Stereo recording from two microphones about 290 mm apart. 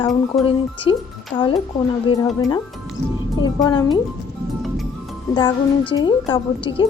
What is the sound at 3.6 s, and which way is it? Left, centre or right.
Speech, centre.